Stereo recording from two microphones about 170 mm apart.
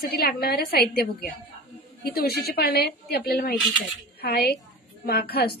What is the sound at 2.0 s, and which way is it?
A woman's voice, 65° left (ahead or behind).